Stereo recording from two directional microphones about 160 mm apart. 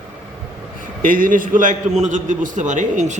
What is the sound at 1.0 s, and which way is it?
A man's voice, 60° right (ahead or behind).